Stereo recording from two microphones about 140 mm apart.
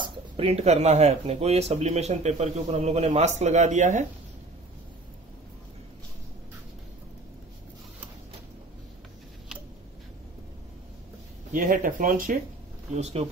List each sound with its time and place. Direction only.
0.0 s speech: 45° right (ahead or behind); by 4.0 s 60° right (ahead or behind)
11.5 s speech: 65° right (ahead or behind)
12.9 s speech: 50° right (ahead or behind)